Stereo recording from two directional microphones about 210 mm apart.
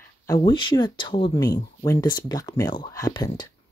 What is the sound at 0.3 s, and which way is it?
Speech, 20° left (ahead or behind).